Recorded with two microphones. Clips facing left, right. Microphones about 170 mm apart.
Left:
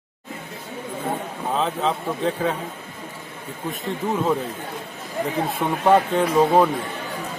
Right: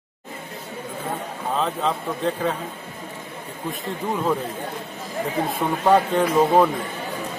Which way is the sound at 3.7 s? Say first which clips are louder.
Left 2 dB; centre (ahead or behind).